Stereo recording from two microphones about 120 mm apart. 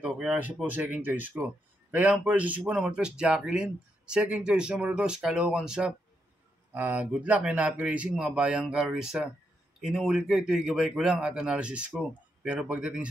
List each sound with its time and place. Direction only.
0.0 s speech: 10° right (ahead or behind)